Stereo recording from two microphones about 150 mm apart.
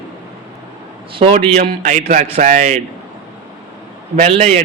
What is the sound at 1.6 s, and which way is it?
A man's voice, 65° right (ahead or behind).